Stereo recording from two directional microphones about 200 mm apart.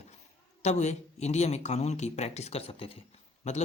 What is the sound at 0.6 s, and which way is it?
Speech, 35° left (ahead or behind).